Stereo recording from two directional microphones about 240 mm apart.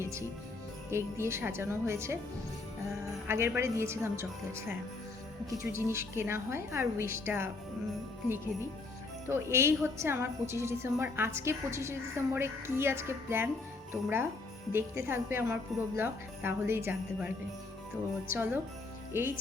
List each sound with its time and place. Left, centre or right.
0.0 s a woman's voice: centre
3.2 s a woman's voice: centre
5.7 s a woman's voice: centre
9.3 s a woman's voice: centre
18.3 s a woman's voice: centre